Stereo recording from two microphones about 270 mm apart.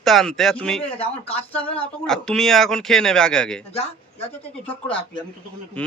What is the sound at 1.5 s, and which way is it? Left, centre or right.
Speech, centre.